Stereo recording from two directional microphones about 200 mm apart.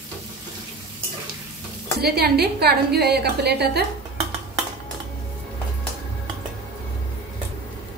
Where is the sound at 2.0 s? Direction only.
50° right (ahead or behind).